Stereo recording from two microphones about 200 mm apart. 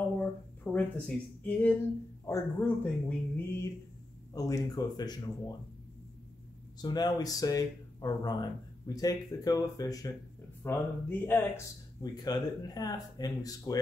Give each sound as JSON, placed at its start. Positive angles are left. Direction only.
{"t": 0.7, "sound": "speech", "side_deg": 10}
{"t": 6.8, "sound": "speech", "side_deg": 20}